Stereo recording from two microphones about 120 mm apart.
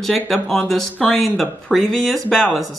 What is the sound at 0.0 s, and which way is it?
Speech, centre (ahead or behind).